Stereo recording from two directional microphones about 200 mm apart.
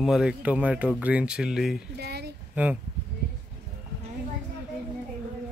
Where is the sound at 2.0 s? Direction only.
55° right (ahead or behind).